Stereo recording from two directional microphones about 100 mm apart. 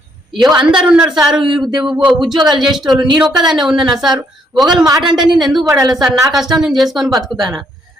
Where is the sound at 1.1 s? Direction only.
5° right (ahead or behind).